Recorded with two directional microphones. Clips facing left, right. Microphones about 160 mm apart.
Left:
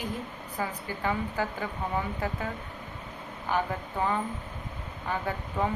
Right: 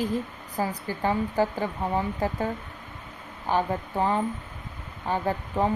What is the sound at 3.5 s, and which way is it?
Speech, 35° right (ahead or behind).